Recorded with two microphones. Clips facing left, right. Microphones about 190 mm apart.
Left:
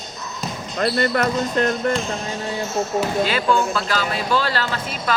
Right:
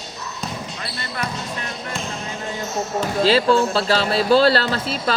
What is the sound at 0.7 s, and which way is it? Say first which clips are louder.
Speech: left 11 dB; 55° left (ahead or behind).